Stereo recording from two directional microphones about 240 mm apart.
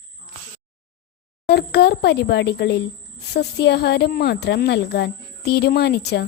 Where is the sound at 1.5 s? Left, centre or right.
Left.